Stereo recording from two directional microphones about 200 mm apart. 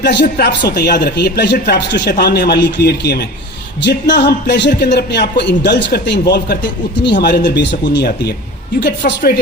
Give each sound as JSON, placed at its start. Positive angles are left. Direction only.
{"t": 0.0, "sound": "speech", "side_deg": 60}
{"t": 8.8, "sound": "speech", "side_deg": 55}